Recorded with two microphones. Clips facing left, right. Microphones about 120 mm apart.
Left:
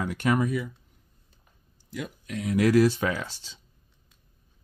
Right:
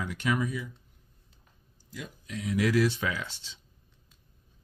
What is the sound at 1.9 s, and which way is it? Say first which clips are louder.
Speech: left 5 dB; 60° left (ahead or behind).